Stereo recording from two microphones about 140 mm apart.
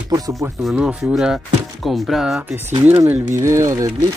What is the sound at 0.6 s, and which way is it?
Speech, 5° right (ahead or behind).